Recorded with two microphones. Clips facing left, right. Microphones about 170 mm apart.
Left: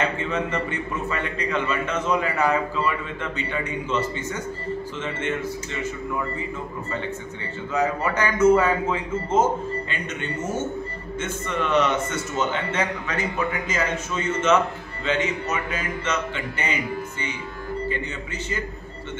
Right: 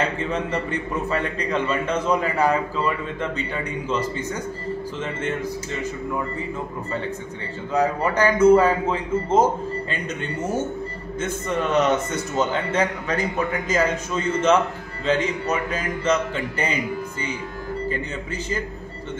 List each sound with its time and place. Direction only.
0.3 s a man's voice: 35° right (ahead or behind)
7.7 s a man's voice: 35° right (ahead or behind)
11.1 s a man's voice: 40° right (ahead or behind)